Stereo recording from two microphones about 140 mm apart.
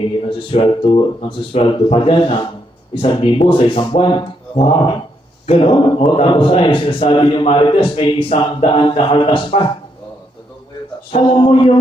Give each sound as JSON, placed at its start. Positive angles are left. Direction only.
{"t": 0.3, "sound": "a man's voice", "side_deg": 40}
{"t": 11.2, "sound": "a man's voice", "side_deg": 35}